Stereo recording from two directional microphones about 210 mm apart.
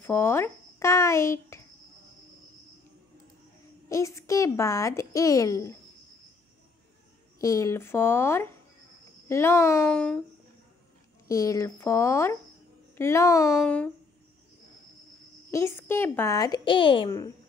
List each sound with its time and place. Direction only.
0.0 s a child's voice: 10° left (ahead or behind)
3.9 s speech: 15° left (ahead or behind)
7.3 s speech: 15° left (ahead or behind)
11.2 s speech: 15° left (ahead or behind)
13.5 s speech: 5° left (ahead or behind)
15.5 s speech: 10° left (ahead or behind)